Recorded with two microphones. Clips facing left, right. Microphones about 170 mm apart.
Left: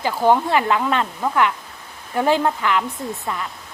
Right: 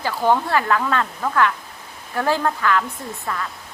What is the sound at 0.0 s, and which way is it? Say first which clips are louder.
Speech: left 2 dB; 15° left (ahead or behind).